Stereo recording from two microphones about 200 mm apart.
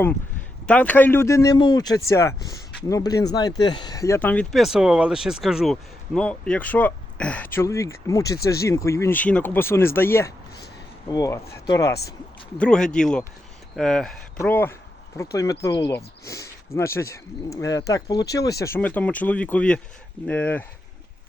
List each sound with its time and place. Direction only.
0.7 s speech: 10° left (ahead or behind)
12.5 s speech: 5° left (ahead or behind)